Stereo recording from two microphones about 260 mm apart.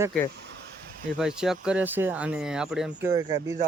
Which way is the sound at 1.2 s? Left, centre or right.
Centre.